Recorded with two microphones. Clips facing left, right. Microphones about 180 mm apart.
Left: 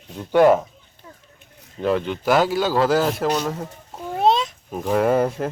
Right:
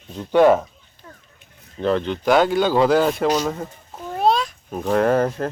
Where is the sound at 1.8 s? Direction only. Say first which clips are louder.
Right 1 dB; 10° left (ahead or behind).